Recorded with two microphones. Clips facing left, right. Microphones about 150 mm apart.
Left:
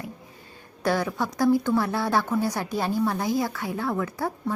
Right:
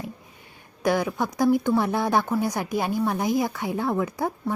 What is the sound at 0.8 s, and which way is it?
A woman's voice, 15° right (ahead or behind).